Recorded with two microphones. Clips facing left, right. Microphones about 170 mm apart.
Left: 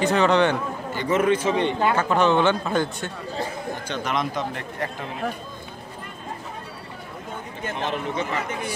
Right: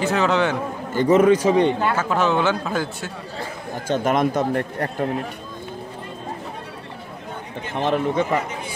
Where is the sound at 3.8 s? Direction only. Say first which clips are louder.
Right 9 dB; 45° right (ahead or behind).